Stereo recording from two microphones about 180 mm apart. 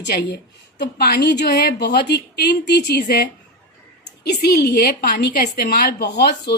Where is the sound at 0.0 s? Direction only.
70° left (ahead or behind).